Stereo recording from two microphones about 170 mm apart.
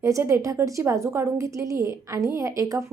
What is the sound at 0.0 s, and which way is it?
A woman's voice, 15° right (ahead or behind).